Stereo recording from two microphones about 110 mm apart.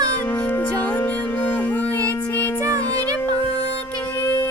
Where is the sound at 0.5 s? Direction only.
15° left (ahead or behind).